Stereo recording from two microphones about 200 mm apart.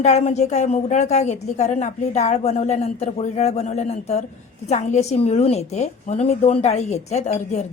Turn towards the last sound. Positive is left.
turn(degrees=35)  # may be behind; listen again after turning